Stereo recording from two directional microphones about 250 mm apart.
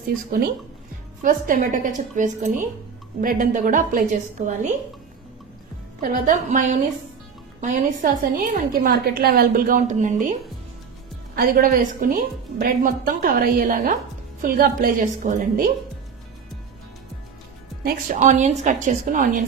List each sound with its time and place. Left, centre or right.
1.2 s a woman's voice: right
5.9 s a woman's voice: right
11.3 s a woman's voice: right
17.8 s a woman's voice: right